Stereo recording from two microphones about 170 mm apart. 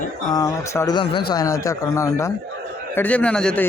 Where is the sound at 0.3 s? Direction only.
20° left (ahead or behind).